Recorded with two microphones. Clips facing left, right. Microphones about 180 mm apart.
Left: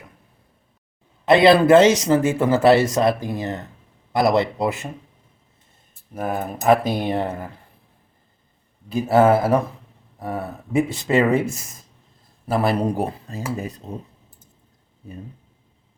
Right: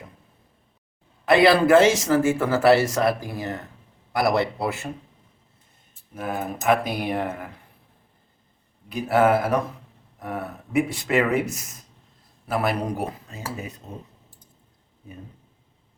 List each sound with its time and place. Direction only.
1.2 s speech: 20° left (ahead or behind)
6.1 s speech: 40° left (ahead or behind)
8.9 s speech: 25° left (ahead or behind)